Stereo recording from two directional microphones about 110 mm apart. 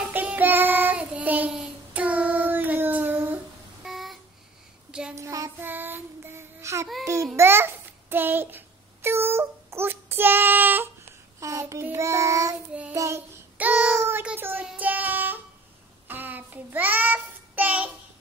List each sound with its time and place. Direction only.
0.1 s child singing: 15° right (ahead or behind)
3.8 s a sound: centre (ahead or behind)
5.1 s child singing: 30° right (ahead or behind)
5.7 s child singing: 20° right (ahead or behind)
7.3 s babbling: 20° right (ahead or behind)
11.3 s child singing: 30° right (ahead or behind)
13.6 s child singing: 15° right (ahead or behind)